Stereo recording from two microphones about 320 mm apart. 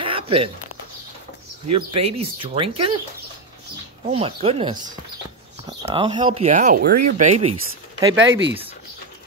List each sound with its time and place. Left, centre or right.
0.0 s a sound: centre
2.0 s speech: centre
4.1 s speech: centre
8.3 s speech: right